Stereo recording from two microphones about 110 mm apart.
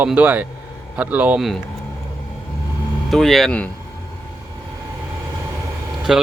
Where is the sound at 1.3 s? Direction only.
Centre (ahead or behind).